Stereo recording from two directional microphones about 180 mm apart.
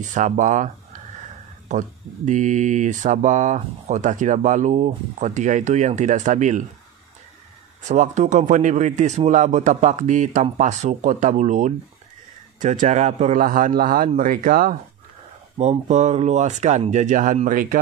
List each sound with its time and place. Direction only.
0.0 s speech: 45° right (ahead or behind)
7.9 s speech: 40° right (ahead or behind)
15.5 s speech: 35° right (ahead or behind)